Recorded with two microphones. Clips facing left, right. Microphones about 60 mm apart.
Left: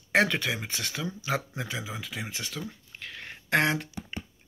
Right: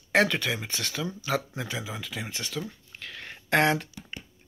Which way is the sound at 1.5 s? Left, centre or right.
Centre.